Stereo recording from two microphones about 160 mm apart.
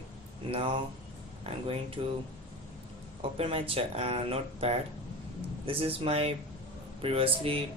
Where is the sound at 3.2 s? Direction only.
35° right (ahead or behind).